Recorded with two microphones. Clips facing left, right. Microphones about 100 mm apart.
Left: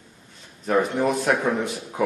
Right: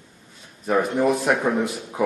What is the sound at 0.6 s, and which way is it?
A man's voice, centre (ahead or behind).